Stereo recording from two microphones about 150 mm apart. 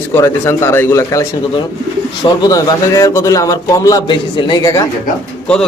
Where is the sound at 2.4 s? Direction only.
20° left (ahead or behind).